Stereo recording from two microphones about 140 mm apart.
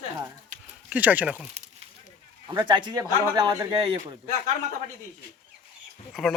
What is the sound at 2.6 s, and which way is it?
Speech, 35° right (ahead or behind).